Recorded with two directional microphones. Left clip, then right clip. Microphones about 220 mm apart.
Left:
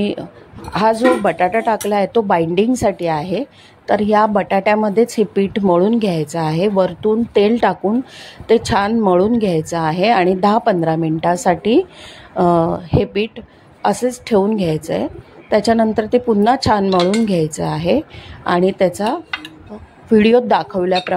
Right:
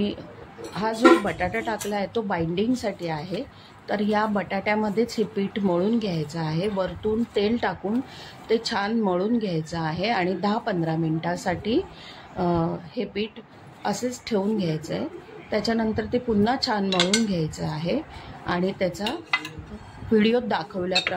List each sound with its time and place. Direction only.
0.0 s speech: 35° left (ahead or behind)